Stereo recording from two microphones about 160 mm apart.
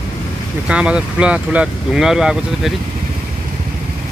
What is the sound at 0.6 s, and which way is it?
Speech, 5° right (ahead or behind).